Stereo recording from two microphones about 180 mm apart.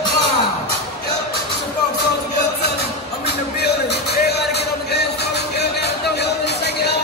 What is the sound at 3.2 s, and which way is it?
Music, 65° left (ahead or behind).